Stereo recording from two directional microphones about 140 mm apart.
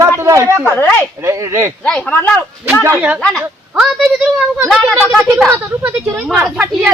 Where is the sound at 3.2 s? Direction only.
Centre (ahead or behind).